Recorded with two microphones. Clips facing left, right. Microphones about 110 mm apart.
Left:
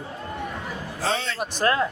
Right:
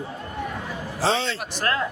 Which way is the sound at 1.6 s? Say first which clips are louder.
Left 4 dB; 20° left (ahead or behind).